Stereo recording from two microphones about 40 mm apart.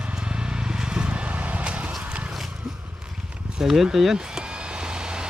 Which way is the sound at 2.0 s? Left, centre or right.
Right.